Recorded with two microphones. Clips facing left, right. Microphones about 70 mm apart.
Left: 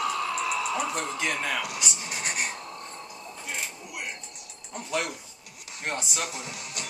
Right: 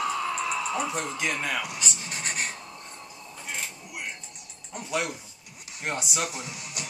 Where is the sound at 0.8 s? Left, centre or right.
Centre.